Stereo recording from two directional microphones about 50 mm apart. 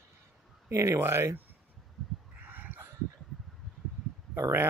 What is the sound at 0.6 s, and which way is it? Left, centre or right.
Speech, right.